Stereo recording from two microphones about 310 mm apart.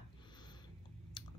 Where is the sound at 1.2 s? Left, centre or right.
Centre.